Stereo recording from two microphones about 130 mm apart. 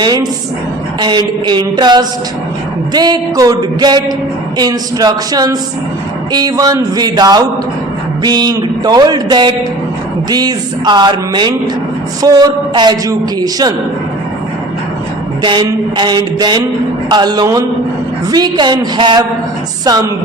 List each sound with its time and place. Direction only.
0.0 s a man's voice: 30° right (ahead or behind)
15.4 s a man's voice: 35° right (ahead or behind)